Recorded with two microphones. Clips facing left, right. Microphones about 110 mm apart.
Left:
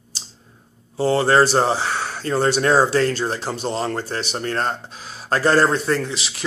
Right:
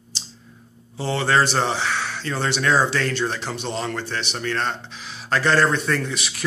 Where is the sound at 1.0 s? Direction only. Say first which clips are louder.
Left 5 dB; 40° left (ahead or behind).